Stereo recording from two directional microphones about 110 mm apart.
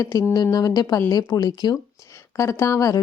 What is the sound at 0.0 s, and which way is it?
A woman's voice, 30° left (ahead or behind).